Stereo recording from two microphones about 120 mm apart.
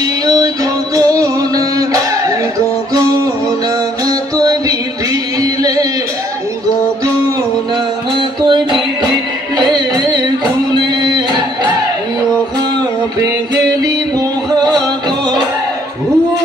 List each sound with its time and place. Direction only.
0.0 s music: 30° right (ahead or behind)
5.4 s a sound: 30° right (ahead or behind)
8.2 s music: 40° right (ahead or behind)